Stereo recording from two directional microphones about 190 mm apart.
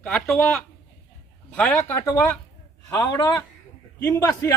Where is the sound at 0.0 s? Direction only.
5° left (ahead or behind).